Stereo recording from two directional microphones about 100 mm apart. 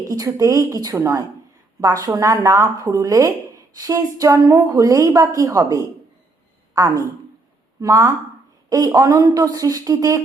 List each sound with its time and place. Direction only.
0.1 s a woman's voice: 35° right (ahead or behind)